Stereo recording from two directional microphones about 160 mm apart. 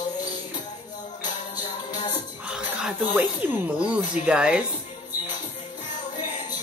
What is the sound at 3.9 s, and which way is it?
Speech, 5° right (ahead or behind).